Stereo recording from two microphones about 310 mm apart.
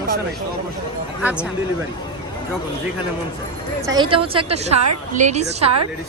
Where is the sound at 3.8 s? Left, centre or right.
Centre.